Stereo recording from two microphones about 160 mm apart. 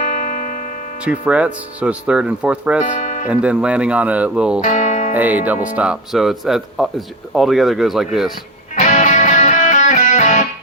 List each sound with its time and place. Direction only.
0.1 s music: 55° left (ahead or behind)
1.0 s speech: 5° right (ahead or behind)
2.8 s music: 55° left (ahead or behind)
3.2 s speech: 5° right (ahead or behind)
4.6 s speech: 50° left (ahead or behind)
5.1 s speech: 10° right (ahead or behind)
8.7 s music: 50° left (ahead or behind)